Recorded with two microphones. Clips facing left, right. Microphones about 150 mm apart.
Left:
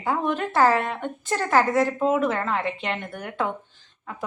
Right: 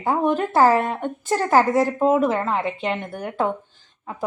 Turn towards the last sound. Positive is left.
turn(degrees=-25)  # may be behind; listen again after turning